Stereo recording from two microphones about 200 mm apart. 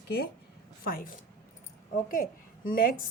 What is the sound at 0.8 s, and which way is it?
A woman's voice, 45° left (ahead or behind).